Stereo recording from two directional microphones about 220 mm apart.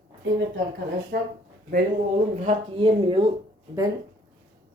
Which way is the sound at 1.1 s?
45° right (ahead or behind).